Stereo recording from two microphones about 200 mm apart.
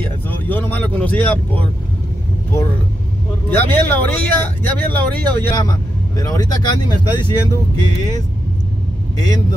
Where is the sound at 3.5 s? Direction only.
10° left (ahead or behind).